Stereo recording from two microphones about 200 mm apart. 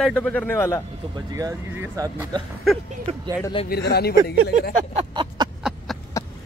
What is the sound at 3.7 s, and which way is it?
Speech, 55° left (ahead or behind).